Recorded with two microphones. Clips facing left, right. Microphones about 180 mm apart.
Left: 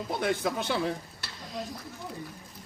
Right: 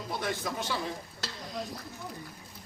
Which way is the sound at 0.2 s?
60° left (ahead or behind).